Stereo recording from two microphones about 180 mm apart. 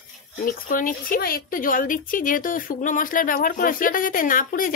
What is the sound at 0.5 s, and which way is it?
Speech, 50° left (ahead or behind).